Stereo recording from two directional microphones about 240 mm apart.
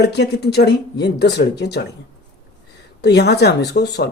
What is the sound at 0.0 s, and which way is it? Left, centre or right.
Speech, left.